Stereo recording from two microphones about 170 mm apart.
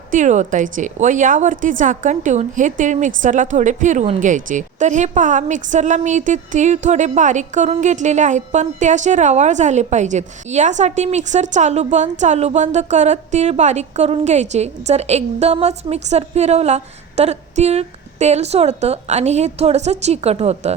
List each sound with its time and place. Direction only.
0.1 s a woman's voice: 45° right (ahead or behind)